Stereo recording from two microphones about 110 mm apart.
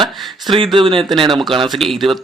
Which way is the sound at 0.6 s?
50° right (ahead or behind).